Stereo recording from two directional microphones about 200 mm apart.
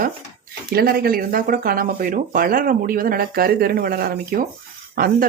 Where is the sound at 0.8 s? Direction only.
50° right (ahead or behind).